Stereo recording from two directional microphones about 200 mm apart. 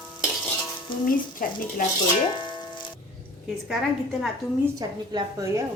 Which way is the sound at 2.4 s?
25° left (ahead or behind).